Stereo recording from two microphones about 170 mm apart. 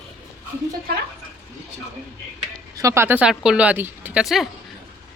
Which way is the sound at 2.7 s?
15° right (ahead or behind).